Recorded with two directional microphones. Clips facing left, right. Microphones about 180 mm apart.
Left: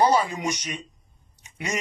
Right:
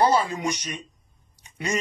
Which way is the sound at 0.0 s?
15° left (ahead or behind).